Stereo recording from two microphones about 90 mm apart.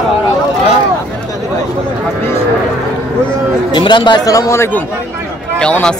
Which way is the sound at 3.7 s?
60° left (ahead or behind).